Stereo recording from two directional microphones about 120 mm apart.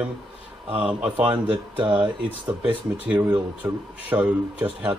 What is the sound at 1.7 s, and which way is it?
Speech, 40° right (ahead or behind).